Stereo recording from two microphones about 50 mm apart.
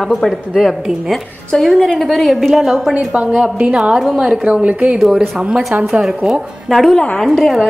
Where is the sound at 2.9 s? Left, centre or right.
Right.